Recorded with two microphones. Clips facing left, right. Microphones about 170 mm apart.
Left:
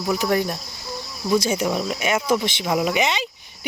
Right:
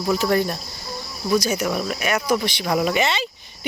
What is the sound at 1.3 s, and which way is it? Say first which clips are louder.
Speech: even; 25° left (ahead or behind).